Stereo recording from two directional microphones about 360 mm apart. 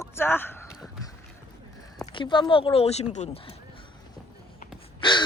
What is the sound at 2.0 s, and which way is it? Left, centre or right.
Speech, centre.